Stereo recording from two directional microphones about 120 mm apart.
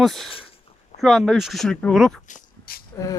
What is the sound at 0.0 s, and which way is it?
Speech, centre (ahead or behind).